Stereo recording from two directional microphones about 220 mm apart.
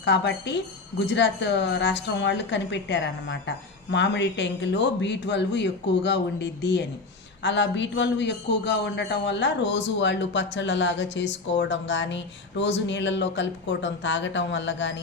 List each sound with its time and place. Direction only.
0.0 s a man's voice: 50° left (ahead or behind)